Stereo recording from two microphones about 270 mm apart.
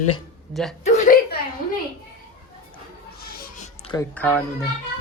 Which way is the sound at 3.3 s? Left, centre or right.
Left.